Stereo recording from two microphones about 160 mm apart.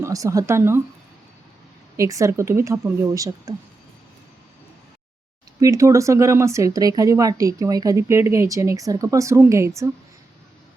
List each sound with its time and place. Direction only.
0.0 s speech: 20° right (ahead or behind)
2.0 s speech: 20° right (ahead or behind)
5.5 s speech: 20° right (ahead or behind)